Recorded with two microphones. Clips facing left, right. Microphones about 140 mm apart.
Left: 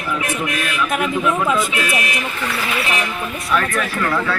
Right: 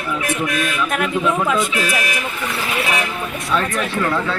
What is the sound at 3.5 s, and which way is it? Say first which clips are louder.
Speech: even; 25° right (ahead or behind).